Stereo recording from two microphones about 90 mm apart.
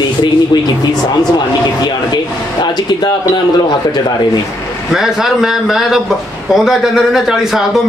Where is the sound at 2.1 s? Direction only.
55° left (ahead or behind).